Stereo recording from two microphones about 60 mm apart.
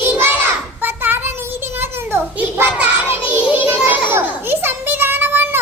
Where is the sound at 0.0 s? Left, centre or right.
Right.